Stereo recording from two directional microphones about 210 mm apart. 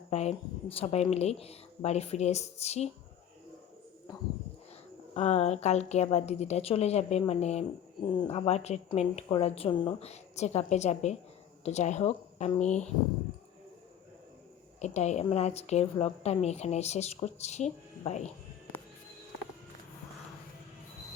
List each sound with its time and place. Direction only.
0.1 s a woman's voice: 30° left (ahead or behind)
5.1 s a woman's voice: 30° left (ahead or behind)
14.8 s a woman's voice: 35° left (ahead or behind)